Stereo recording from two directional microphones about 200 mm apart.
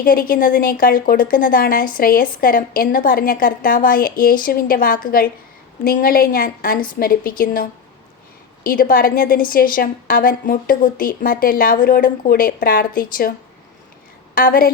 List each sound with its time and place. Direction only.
0.0 s a woman's voice: 45° left (ahead or behind)
14.3 s a woman's voice: 45° left (ahead or behind)